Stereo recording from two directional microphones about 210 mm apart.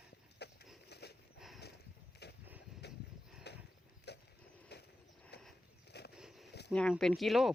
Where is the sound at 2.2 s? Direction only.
50° left (ahead or behind).